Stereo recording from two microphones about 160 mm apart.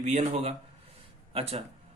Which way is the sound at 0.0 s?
45° right (ahead or behind).